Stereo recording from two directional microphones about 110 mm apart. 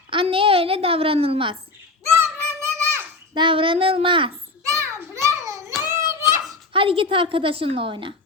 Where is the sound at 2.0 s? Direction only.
25° right (ahead or behind).